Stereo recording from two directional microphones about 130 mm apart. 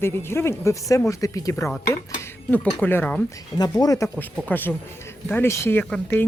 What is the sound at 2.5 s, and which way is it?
Speech, 10° left (ahead or behind).